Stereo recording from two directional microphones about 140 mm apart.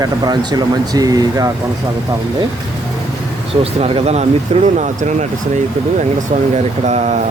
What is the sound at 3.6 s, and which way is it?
Speech, 45° right (ahead or behind).